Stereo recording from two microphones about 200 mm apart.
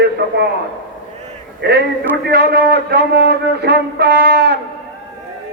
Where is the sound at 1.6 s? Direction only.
55° right (ahead or behind).